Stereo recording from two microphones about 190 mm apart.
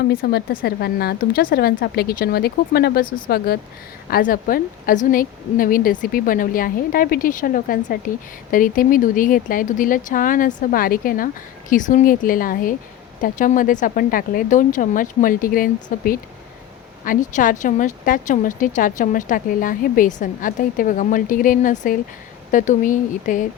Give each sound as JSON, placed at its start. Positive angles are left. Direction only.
{"t": 0.1, "sound": "speech", "side_deg": 50}